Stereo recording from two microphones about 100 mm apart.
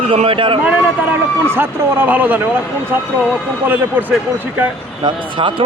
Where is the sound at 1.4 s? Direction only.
25° right (ahead or behind).